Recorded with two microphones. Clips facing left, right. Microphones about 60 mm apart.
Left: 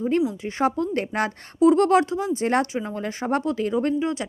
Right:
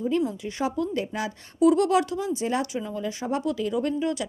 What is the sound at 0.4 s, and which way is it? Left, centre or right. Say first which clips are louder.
Speech: left 4 dB; left.